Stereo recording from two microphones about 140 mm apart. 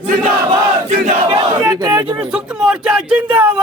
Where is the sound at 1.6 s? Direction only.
20° right (ahead or behind).